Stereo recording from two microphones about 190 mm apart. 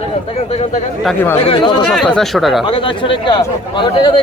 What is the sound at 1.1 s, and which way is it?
Speech, 10° left (ahead or behind).